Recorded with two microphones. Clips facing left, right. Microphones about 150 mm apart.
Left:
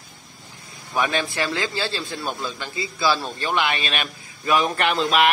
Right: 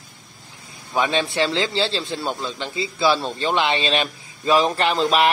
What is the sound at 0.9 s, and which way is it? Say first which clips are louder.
A man's voice: right 3 dB; 25° right (ahead or behind).